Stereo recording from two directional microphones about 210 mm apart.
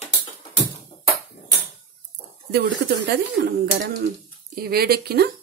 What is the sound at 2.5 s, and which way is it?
A woman's voice, 50° right (ahead or behind).